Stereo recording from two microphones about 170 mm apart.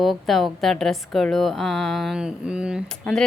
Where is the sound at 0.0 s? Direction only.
Centre (ahead or behind).